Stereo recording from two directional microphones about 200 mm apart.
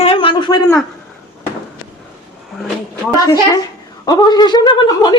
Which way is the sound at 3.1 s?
15° left (ahead or behind).